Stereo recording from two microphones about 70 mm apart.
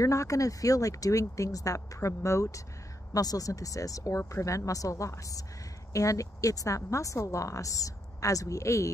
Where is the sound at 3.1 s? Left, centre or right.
Left.